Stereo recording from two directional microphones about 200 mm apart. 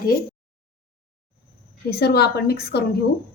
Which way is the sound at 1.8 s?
55° left (ahead or behind).